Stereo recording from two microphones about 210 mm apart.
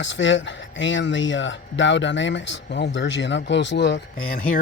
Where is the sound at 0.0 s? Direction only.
60° left (ahead or behind).